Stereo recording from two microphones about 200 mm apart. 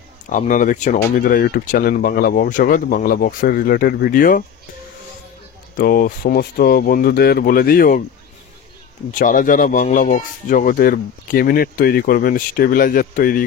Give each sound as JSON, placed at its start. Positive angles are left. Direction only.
{"t": 0.3, "sound": "speech", "side_deg": 40}
{"t": 5.8, "sound": "speech", "side_deg": 45}
{"t": 9.1, "sound": "speech", "side_deg": 40}